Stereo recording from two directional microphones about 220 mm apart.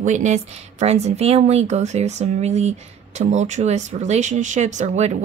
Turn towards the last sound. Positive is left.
turn(degrees=-30)  # may be behind; listen again after turning